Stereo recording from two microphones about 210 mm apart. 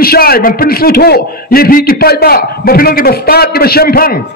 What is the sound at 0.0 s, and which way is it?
A man's voice, 45° left (ahead or behind).